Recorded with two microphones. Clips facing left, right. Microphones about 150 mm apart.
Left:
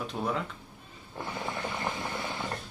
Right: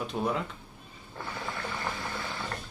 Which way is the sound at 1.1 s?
20° left (ahead or behind).